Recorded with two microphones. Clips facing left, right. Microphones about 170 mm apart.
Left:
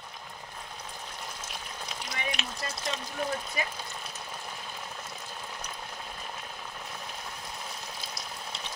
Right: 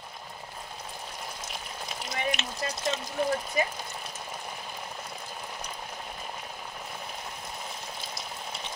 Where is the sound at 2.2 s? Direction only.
Centre (ahead or behind).